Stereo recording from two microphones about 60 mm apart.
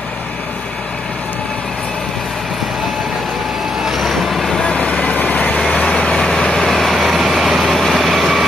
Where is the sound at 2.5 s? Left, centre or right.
Centre.